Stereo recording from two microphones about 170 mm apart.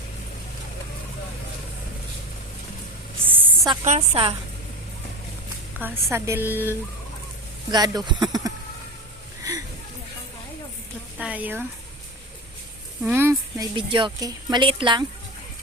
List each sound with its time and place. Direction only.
3.2 s a sound: 10° right (ahead or behind)
3.8 s a woman's voice: 40° right (ahead or behind)
5.8 s a woman's voice: 15° right (ahead or behind)
7.7 s speech: 25° right (ahead or behind)
9.4 s a sound: 20° right (ahead or behind)
11.2 s speech: 10° right (ahead or behind)
13.1 s a woman's voice: 15° right (ahead or behind)
13.7 s speech: 30° right (ahead or behind)